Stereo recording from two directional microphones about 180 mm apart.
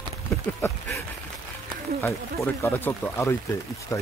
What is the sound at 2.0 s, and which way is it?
Speech, 10° left (ahead or behind).